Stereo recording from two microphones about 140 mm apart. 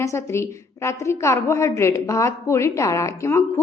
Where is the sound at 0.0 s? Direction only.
20° left (ahead or behind).